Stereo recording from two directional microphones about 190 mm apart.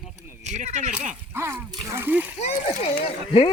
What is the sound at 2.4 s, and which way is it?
Speech, 35° left (ahead or behind).